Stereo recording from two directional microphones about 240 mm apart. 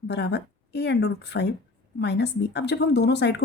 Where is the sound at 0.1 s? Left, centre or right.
Left.